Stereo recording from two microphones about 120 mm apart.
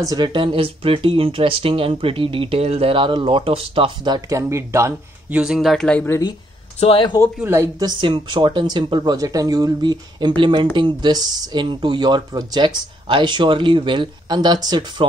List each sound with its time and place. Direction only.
0.0 s speech: 35° right (ahead or behind)
4.4 s speech: 25° right (ahead or behind)
5.3 s speech: 5° right (ahead or behind)
6.8 s speech: 55° left (ahead or behind)
7.4 s speech: 25° right (ahead or behind)
7.8 s speech: 40° right (ahead or behind)